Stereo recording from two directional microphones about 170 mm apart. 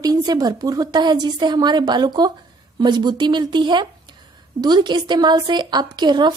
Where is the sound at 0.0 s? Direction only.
25° right (ahead or behind).